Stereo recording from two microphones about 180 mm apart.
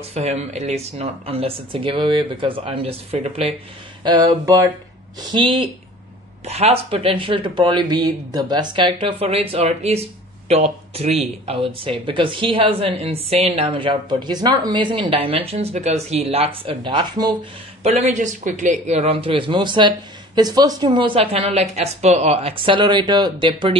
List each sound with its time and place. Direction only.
0.1 s speech: 35° right (ahead or behind)
4.0 s speech: 20° right (ahead or behind)
17.8 s speech: 40° right (ahead or behind)